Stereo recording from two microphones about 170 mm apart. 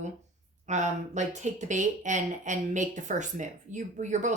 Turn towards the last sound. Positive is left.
turn(degrees=-45)  # may be behind; listen again after turning